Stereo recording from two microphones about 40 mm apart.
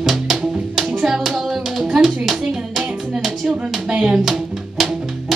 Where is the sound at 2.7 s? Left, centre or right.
Centre.